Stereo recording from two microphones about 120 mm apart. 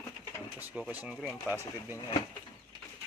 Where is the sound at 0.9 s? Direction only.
15° right (ahead or behind).